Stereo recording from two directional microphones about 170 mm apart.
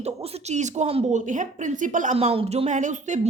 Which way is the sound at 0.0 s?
35° right (ahead or behind).